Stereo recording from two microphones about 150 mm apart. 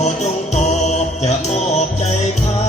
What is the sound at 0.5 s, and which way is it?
Music, 50° left (ahead or behind).